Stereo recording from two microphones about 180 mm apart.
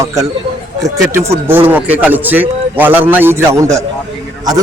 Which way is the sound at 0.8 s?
15° right (ahead or behind).